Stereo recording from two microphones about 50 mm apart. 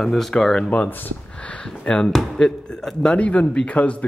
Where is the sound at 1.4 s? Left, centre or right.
Left.